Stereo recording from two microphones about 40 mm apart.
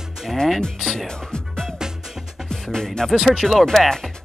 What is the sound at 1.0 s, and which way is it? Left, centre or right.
Music, centre.